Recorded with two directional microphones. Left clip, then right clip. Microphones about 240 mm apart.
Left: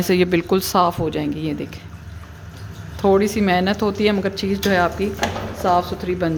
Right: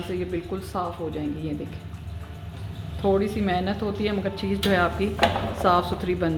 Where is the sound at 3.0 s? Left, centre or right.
Left.